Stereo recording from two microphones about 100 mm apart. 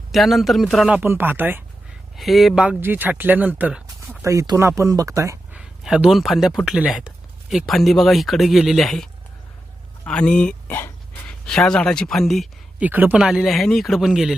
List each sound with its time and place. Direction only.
0.1 s speech: centre (ahead or behind)
0.9 s speech: 15° right (ahead or behind)
2.1 s speech: centre (ahead or behind)
2.6 s speech: 20° right (ahead or behind)
4.2 s speech: 30° right (ahead or behind)
5.5 s speech: 10° right (ahead or behind)
7.5 s speech: centre (ahead or behind)
10.1 s a sound: 10° left (ahead or behind)
11.3 s speech: 5° left (ahead or behind)
12.8 s speech: 15° right (ahead or behind)
13.1 s speech: 5° right (ahead or behind)